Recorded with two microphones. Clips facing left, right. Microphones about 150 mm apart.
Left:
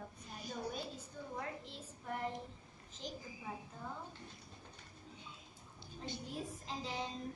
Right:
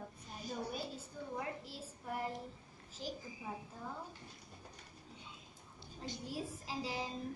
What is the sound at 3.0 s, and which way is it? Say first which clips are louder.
Speech: right 2 dB; 5° right (ahead or behind).